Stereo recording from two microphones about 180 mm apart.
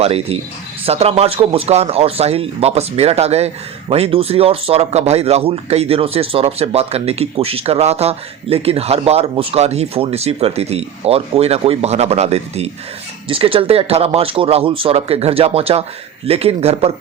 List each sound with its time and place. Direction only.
0.0 s speech: 35° right (ahead or behind)